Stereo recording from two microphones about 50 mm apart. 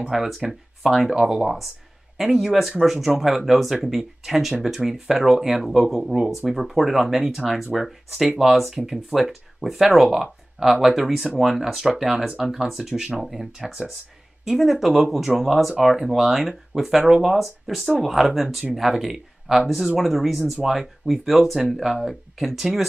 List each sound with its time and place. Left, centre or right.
0.1 s speech: centre